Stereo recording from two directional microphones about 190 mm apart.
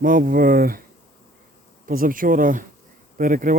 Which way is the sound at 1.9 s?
50° right (ahead or behind).